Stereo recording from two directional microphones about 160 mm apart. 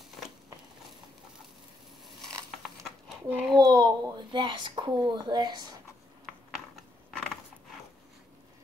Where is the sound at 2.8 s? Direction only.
Centre (ahead or behind).